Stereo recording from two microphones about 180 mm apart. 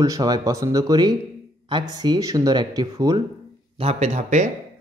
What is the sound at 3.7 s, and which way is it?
Speech, 35° right (ahead or behind).